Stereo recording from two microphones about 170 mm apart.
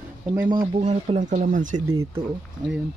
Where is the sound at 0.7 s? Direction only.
40° right (ahead or behind).